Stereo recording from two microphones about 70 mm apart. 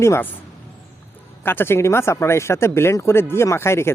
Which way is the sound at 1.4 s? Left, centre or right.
Left.